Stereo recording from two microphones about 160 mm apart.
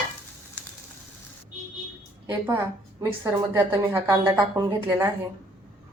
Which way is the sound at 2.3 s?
15° right (ahead or behind).